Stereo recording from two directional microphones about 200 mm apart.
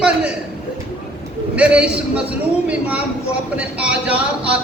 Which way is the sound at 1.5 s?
5° right (ahead or behind).